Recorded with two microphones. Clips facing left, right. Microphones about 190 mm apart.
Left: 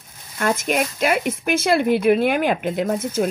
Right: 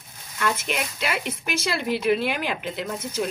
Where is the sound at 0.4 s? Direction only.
50° left (ahead or behind).